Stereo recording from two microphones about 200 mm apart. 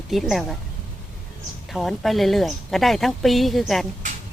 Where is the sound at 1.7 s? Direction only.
Centre (ahead or behind).